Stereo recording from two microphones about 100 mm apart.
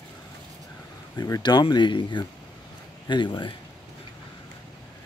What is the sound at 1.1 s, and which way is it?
Speech, 40° left (ahead or behind).